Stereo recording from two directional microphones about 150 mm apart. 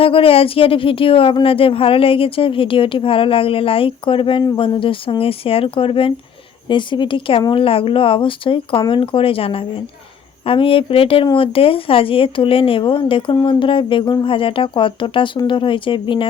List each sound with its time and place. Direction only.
0.0 s speech: 40° left (ahead or behind)